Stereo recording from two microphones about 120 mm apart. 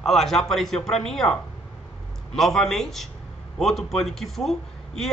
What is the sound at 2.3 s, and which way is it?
A man's voice, 5° left (ahead or behind).